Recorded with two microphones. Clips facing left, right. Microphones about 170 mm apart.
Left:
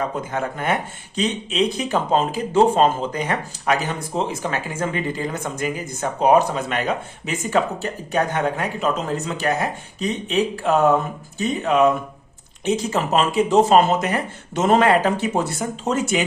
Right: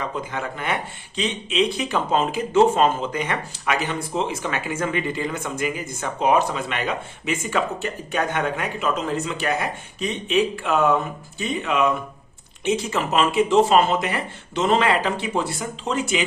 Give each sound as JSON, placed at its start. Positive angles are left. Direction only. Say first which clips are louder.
{"t": 0.0, "sound": "speech", "louder": "left 4 dB", "side_deg": 45}